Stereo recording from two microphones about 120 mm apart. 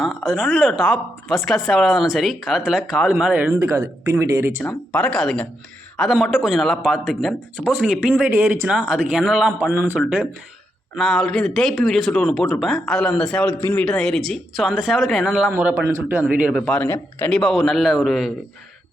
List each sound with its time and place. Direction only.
0.0 s a woman's voice: centre (ahead or behind)
3.5 s speech: 25° right (ahead or behind)
4.6 s a woman's voice: 10° left (ahead or behind)
8.1 s a man's voice: 15° right (ahead or behind)
9.6 s a man's voice: 15° right (ahead or behind)
10.9 s a woman's voice: 5° left (ahead or behind)
13.6 s a man's voice: 20° left (ahead or behind)
13.8 s a woman's voice: 5° left (ahead or behind)
15.5 s speech: 20° right (ahead or behind)
16.2 s a man's voice: 10° right (ahead or behind)
16.6 s speech: 10° left (ahead or behind)
17.3 s a woman's voice: centre (ahead or behind)